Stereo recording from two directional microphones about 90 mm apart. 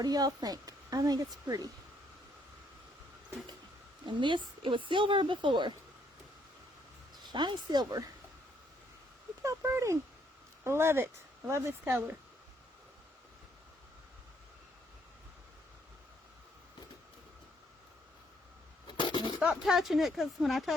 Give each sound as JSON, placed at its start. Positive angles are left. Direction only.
{"t": 0.0, "sound": "speech", "side_deg": -45}
{"t": 4.0, "sound": "a woman's voice", "side_deg": -65}
{"t": 7.2, "sound": "speech", "side_deg": -55}
{"t": 9.4, "sound": "a sound", "side_deg": -35}
{"t": 10.6, "sound": "speech", "side_deg": -30}
{"t": 18.9, "sound": "a sound", "side_deg": 60}
{"t": 19.6, "sound": "speech", "side_deg": 0}